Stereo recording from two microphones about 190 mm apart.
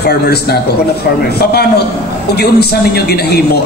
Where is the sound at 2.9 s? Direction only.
55° left (ahead or behind).